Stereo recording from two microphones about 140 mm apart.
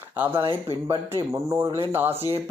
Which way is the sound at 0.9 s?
20° right (ahead or behind).